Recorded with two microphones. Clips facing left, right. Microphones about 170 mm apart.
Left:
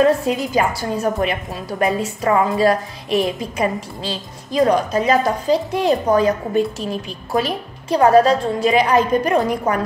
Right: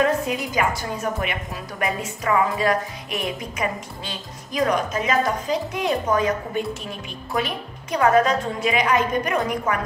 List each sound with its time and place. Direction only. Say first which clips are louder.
0.6 s a woman's voice: left 5 dB; 35° left (ahead or behind)